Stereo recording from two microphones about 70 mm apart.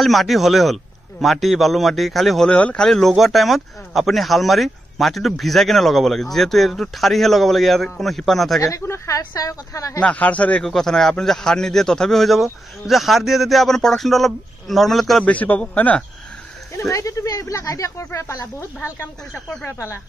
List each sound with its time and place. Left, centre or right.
0.0 s speech: centre
2.5 s speech: centre
8.5 s speech: left
9.1 s speech: left
9.9 s speech: left
10.6 s a man's voice: centre
15.2 s speech: left
16.7 s speech: left